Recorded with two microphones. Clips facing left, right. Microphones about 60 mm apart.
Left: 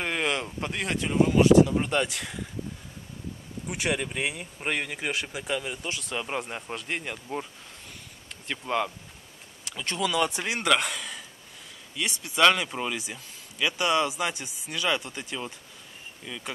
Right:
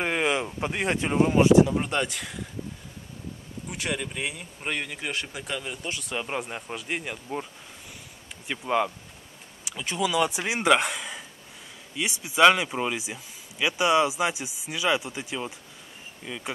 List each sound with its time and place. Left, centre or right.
0.0 s a sound: centre
1.7 s speech: centre
3.6 s speech: centre
8.5 s speech: centre